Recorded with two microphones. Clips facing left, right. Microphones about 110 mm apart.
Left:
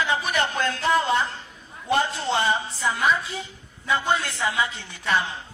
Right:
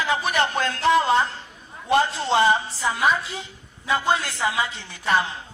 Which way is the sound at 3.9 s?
30° right (ahead or behind).